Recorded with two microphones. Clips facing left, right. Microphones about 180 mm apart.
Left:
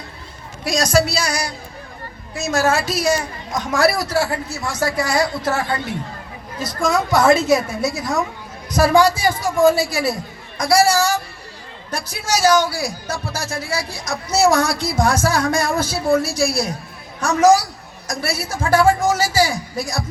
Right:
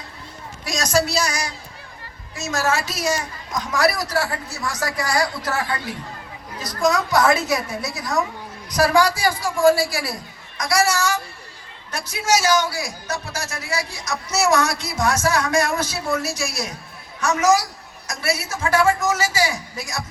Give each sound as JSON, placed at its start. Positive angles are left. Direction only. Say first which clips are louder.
{"t": 0.8, "sound": "a man's voice", "louder": "left 2 dB", "side_deg": 30}